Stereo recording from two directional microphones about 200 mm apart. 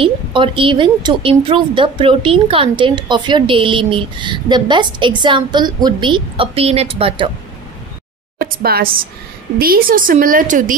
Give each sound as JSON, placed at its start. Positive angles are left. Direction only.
{"t": 0.0, "sound": "speech", "side_deg": -25}
{"t": 8.4, "sound": "speech", "side_deg": -50}